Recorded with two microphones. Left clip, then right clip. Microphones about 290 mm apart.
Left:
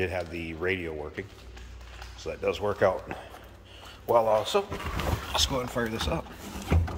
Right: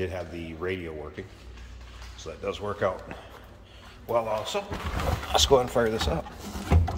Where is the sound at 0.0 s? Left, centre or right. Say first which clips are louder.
Left 2 dB; centre.